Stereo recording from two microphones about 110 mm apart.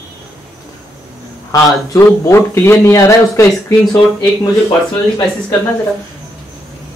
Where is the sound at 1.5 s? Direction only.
30° left (ahead or behind).